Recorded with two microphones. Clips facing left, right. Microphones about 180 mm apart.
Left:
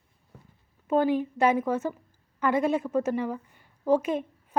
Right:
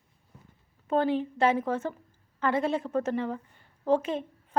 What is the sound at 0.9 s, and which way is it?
A woman's voice, 10° left (ahead or behind).